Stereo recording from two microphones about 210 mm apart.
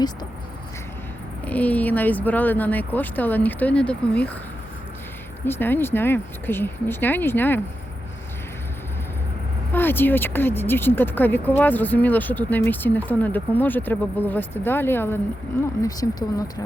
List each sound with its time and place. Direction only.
1.5 s speech: 5° left (ahead or behind)
5.5 s speech: 10° left (ahead or behind)
9.7 s speech: 10° left (ahead or behind)